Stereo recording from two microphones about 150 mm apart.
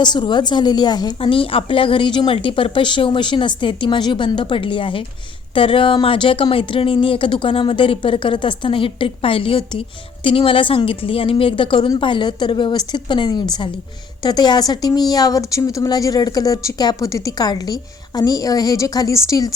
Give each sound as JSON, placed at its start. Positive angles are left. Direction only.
{"t": 0.0, "sound": "speech", "side_deg": 30}